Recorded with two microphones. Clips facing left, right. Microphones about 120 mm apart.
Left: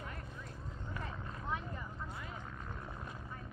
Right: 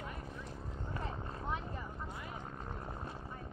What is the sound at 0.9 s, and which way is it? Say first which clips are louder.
Vehicle: right 3 dB; 30° right (ahead or behind).